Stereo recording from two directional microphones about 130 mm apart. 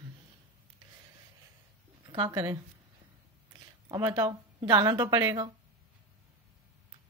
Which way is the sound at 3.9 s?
35° right (ahead or behind).